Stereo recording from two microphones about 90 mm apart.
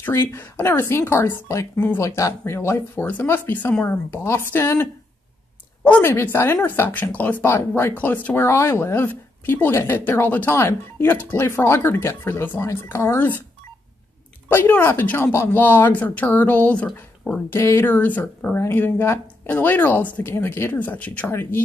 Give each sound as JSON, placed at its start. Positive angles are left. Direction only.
{"t": 0.0, "sound": "a woman's voice", "side_deg": 30}
{"t": 5.9, "sound": "a woman's voice", "side_deg": 25}
{"t": 7.4, "sound": "a woman's voice", "side_deg": 30}
{"t": 14.5, "sound": "a woman's voice", "side_deg": 20}
{"t": 17.5, "sound": "a woman's voice", "side_deg": 30}